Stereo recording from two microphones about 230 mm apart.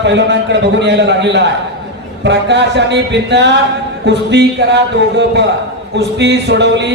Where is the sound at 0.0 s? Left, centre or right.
Right.